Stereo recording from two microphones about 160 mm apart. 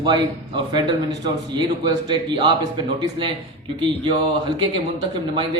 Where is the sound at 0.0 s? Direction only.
25° right (ahead or behind).